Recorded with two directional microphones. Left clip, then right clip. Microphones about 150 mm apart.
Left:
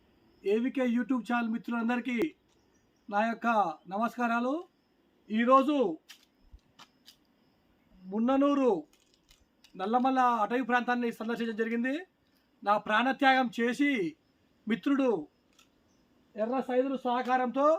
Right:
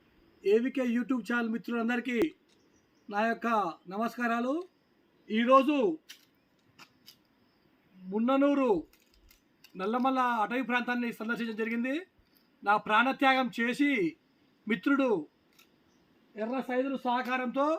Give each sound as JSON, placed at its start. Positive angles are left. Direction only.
{"t": 0.4, "sound": "speech", "side_deg": -5}
{"t": 5.3, "sound": "a man's voice", "side_deg": 15}
{"t": 6.8, "sound": "a sound", "side_deg": -5}
{"t": 8.1, "sound": "a man's voice", "side_deg": 20}
{"t": 9.3, "sound": "a sound", "side_deg": -5}
{"t": 9.7, "sound": "a man's voice", "side_deg": 15}
{"t": 16.6, "sound": "a man's voice", "side_deg": 15}